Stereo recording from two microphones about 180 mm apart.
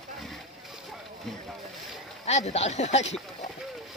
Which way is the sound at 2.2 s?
35° left (ahead or behind).